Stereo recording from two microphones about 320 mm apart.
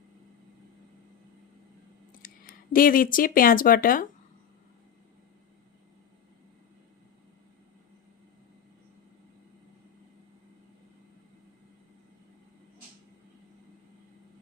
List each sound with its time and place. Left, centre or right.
2.2 s clicking: left
2.7 s speech: left